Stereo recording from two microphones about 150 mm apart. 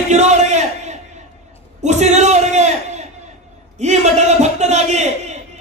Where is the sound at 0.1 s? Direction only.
50° right (ahead or behind).